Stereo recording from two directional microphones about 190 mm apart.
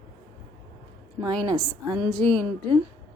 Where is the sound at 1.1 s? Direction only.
25° right (ahead or behind).